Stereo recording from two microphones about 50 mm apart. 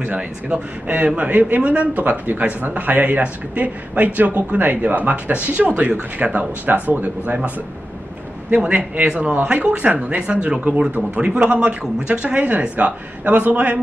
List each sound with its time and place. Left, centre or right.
0.1 s speech: right
1.8 s a man's voice: right
8.5 s speech: right